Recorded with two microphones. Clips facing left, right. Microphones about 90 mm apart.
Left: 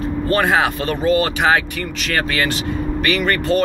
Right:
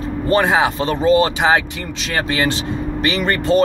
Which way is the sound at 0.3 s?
20° right (ahead or behind).